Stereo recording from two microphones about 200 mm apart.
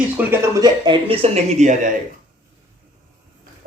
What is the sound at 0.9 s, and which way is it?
Speech, 30° right (ahead or behind).